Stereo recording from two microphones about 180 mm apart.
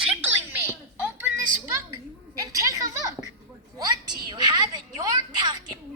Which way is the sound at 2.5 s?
20° right (ahead or behind).